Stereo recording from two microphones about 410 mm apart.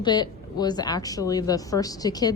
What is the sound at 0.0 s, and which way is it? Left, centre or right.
A woman's voice, centre.